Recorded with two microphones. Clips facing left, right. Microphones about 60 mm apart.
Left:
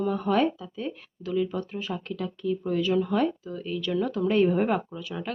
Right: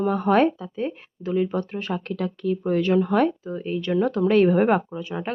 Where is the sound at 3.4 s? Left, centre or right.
Right.